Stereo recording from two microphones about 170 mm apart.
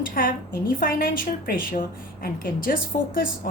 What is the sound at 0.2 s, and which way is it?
A woman's voice, 55° left (ahead or behind).